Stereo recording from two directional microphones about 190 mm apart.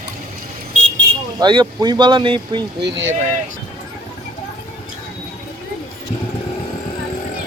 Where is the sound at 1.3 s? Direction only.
20° right (ahead or behind).